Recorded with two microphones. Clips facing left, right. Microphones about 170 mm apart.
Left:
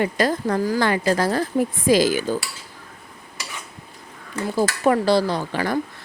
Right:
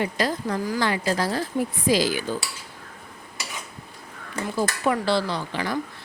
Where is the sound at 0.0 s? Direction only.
50° left (ahead or behind).